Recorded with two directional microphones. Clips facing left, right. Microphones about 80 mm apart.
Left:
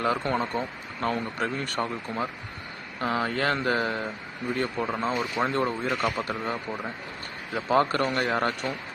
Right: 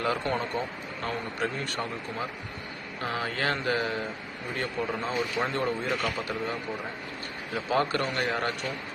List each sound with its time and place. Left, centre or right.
0.0 s speech: left
3.0 s speech: left